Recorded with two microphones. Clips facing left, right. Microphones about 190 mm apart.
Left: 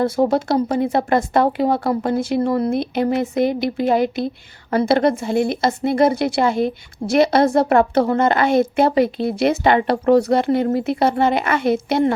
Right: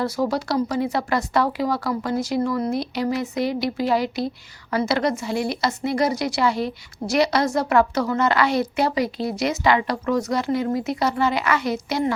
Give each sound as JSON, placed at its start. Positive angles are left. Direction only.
{"t": 0.3, "sound": "a woman's voice", "side_deg": 55}